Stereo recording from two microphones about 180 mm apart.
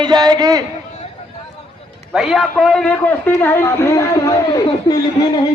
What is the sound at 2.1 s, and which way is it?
A man's voice, centre (ahead or behind).